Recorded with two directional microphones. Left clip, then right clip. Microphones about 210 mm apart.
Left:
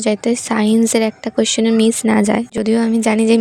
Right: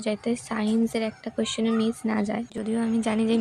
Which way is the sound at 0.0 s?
40° left (ahead or behind).